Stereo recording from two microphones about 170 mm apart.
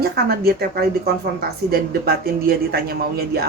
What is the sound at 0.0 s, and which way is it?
A woman's voice, 65° right (ahead or behind).